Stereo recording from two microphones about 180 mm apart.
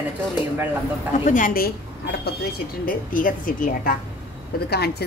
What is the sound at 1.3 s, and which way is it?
Speech, 50° left (ahead or behind).